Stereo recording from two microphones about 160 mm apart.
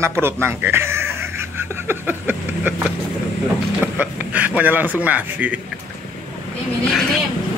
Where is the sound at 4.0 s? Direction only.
10° right (ahead or behind).